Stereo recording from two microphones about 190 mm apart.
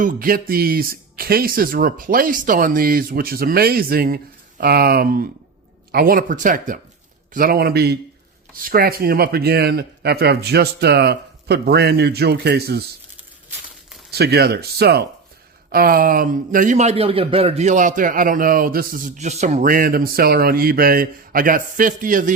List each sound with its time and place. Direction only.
0.0 s a man's voice: 45° right (ahead or behind)
14.1 s a man's voice: 60° right (ahead or behind)